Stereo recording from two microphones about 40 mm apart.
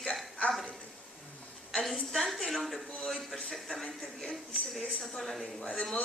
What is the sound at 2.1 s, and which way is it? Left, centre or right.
A man's voice, centre.